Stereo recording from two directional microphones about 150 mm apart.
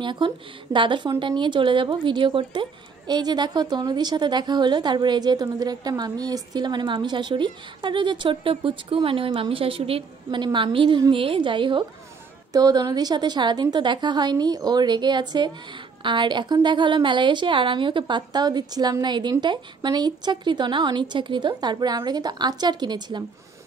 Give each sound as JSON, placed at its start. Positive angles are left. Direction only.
{"t": 0.0, "sound": "a woman's voice", "side_deg": -30}